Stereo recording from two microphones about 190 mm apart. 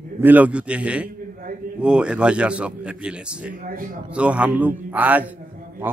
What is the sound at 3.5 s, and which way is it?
Speech, 45° right (ahead or behind).